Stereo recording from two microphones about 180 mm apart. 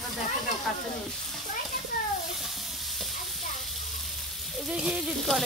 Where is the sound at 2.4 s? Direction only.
Centre (ahead or behind).